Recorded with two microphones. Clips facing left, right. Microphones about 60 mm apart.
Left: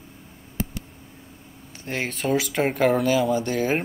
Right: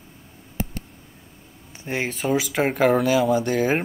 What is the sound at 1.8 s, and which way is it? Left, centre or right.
Speech, centre.